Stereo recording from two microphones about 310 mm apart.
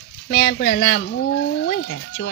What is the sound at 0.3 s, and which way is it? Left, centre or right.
Speech, left.